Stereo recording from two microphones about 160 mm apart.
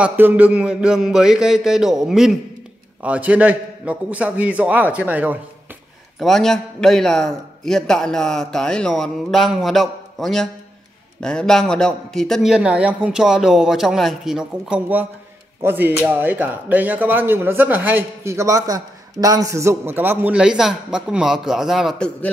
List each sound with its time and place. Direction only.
0.0 s a man's voice: 10° right (ahead or behind)
6.1 s a man's voice: centre (ahead or behind)